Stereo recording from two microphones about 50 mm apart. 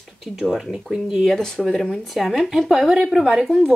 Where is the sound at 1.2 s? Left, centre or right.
Centre.